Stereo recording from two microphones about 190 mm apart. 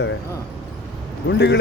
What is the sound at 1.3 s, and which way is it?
Speech, 65° left (ahead or behind).